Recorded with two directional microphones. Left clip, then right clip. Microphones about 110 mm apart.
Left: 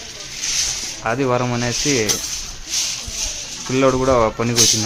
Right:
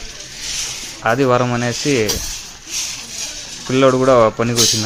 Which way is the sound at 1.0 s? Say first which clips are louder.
Right 5 dB; 25° right (ahead or behind).